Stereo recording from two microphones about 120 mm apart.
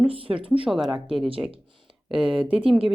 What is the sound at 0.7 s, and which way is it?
Speech, centre (ahead or behind).